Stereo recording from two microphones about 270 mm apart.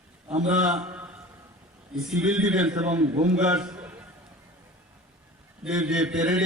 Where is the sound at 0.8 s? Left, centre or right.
Centre.